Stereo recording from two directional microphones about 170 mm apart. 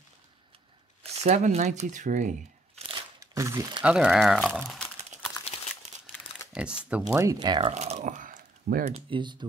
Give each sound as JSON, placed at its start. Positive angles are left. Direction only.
{"t": 1.0, "sound": "speech", "side_deg": -40}
{"t": 2.9, "sound": "crunch", "side_deg": -20}
{"t": 3.8, "sound": "speech", "side_deg": -5}
{"t": 6.1, "sound": "crumpling", "side_deg": 15}
{"t": 6.5, "sound": "speech", "side_deg": -5}
{"t": 7.7, "sound": "a sound", "side_deg": -40}
{"t": 8.9, "sound": "speech", "side_deg": -30}